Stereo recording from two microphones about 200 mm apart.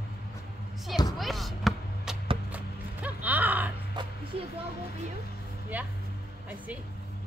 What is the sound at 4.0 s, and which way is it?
Music, 20° right (ahead or behind).